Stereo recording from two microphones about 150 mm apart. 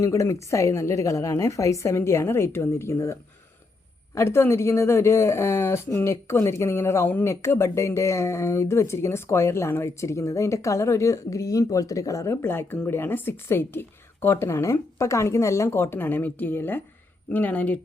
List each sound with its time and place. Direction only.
0.0 s a woman's voice: 20° left (ahead or behind)